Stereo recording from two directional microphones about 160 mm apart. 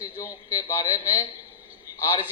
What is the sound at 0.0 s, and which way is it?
A man's voice, 20° left (ahead or behind).